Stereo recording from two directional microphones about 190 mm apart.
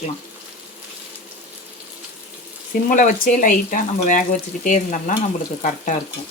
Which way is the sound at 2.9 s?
45° left (ahead or behind).